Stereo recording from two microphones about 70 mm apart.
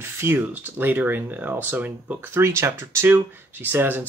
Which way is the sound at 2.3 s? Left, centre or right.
Right.